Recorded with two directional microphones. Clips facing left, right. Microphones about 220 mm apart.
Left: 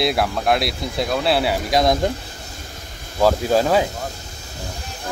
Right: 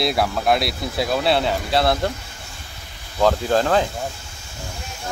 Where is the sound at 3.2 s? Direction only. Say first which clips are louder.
Left 1 dB; 10° left (ahead or behind).